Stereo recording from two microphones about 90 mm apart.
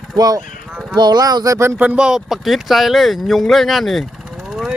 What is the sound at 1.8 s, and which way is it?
Speech, 15° right (ahead or behind).